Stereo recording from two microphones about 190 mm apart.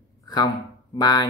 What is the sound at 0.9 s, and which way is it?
Speech, 20° left (ahead or behind).